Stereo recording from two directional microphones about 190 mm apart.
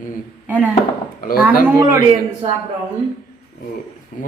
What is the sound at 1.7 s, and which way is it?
Speech, 15° right (ahead or behind).